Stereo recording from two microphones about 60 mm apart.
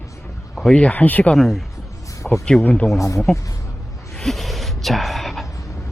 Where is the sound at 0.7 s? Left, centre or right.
Centre.